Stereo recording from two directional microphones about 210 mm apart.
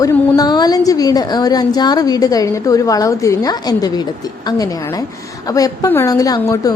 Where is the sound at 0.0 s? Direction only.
20° left (ahead or behind).